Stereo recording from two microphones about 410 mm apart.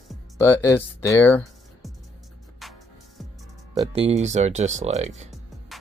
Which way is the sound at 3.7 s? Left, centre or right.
Centre.